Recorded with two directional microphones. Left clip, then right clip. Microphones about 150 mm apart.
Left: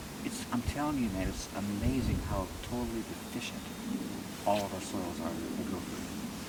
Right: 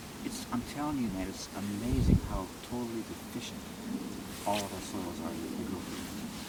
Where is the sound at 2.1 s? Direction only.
5° left (ahead or behind).